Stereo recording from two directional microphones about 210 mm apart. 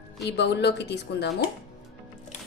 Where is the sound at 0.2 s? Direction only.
55° left (ahead or behind).